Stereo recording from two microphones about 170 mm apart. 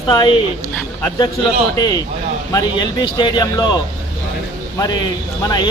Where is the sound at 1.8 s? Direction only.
20° left (ahead or behind).